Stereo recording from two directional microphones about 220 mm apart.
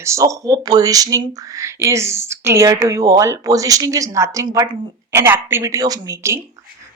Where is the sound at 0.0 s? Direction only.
15° right (ahead or behind).